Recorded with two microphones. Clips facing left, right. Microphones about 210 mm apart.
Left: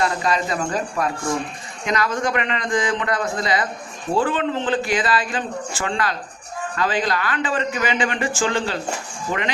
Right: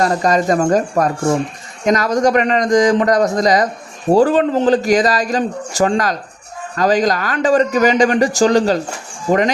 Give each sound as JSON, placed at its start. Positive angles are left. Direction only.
{"t": 0.0, "sound": "speech", "side_deg": -45}